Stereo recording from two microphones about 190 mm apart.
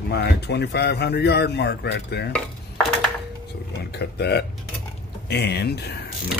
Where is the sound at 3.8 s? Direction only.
60° left (ahead or behind).